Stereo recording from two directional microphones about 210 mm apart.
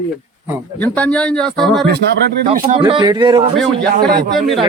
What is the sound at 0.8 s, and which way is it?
A man's voice, 5° left (ahead or behind).